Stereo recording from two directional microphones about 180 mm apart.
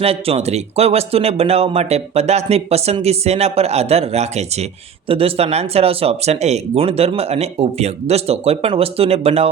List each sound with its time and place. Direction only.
0.0 s speech: 35° right (ahead or behind)